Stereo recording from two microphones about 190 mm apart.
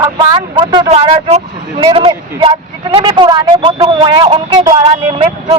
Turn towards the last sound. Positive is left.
turn(degrees=-30)  # may be behind; listen again after turning